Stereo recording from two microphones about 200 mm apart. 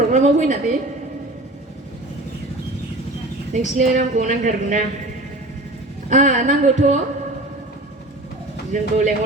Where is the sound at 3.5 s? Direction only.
40° right (ahead or behind).